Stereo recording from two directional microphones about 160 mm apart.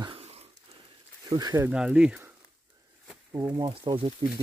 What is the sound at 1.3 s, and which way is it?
Speech, 25° right (ahead or behind).